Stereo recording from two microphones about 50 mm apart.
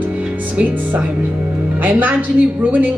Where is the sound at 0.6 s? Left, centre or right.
Right.